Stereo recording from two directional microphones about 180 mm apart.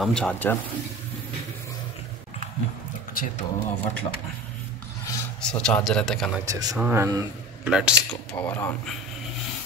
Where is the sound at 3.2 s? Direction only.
50° left (ahead or behind).